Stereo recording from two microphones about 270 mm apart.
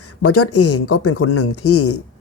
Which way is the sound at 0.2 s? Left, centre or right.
Left.